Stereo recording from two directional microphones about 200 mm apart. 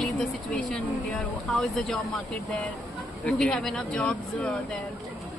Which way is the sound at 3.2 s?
5° left (ahead or behind).